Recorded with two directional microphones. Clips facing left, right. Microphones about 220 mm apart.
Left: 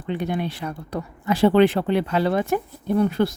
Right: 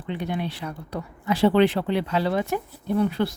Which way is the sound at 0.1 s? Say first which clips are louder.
Left 3 dB; 50° left (ahead or behind).